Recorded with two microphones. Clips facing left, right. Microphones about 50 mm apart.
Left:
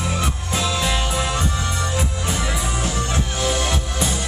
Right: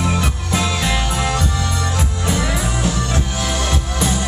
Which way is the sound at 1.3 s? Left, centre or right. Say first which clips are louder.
Right 2 dB; centre.